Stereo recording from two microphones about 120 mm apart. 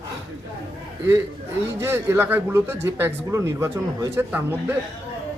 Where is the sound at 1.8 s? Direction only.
20° right (ahead or behind).